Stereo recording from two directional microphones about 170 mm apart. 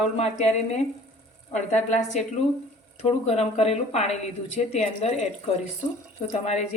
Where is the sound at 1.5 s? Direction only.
45° left (ahead or behind).